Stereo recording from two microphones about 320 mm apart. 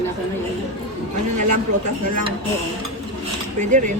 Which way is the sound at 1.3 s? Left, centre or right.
Right.